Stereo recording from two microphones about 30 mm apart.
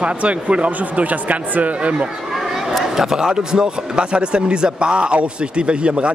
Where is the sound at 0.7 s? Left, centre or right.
Right.